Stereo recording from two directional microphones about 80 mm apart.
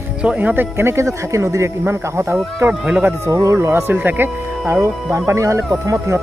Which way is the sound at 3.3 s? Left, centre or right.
Right.